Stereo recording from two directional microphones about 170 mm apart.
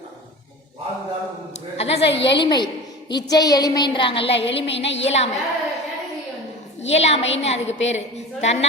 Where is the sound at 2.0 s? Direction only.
90° left.